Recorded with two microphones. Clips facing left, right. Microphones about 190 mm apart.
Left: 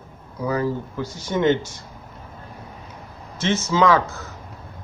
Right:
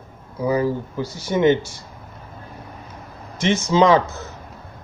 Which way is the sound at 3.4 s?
15° right (ahead or behind).